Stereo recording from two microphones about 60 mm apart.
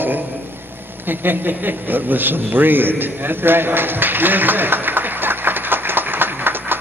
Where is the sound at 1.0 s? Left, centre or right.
Right.